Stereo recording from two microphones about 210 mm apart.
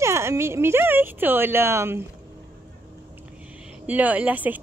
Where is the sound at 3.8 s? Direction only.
5° right (ahead or behind).